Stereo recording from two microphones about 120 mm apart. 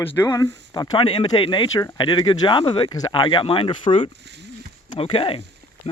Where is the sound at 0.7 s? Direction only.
35° left (ahead or behind).